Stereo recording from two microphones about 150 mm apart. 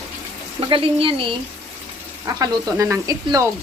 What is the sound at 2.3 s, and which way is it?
Speech, 20° right (ahead or behind).